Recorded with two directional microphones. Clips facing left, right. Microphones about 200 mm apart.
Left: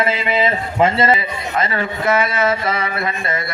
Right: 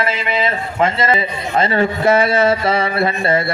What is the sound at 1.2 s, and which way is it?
Speech, 30° right (ahead or behind).